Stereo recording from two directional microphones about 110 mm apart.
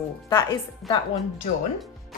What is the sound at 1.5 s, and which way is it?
Speech, 90° left.